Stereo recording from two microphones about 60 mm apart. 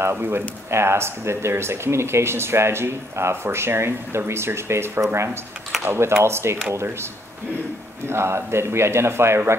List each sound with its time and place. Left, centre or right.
0.0 s speech: right
8.1 s speech: right